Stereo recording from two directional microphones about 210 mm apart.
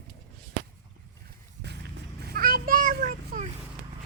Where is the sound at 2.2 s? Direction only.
45° right (ahead or behind).